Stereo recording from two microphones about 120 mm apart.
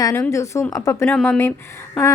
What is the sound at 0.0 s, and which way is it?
A woman's voice, 25° left (ahead or behind).